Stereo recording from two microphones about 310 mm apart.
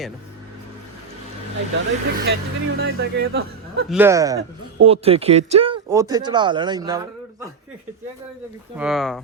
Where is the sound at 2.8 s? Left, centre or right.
Right.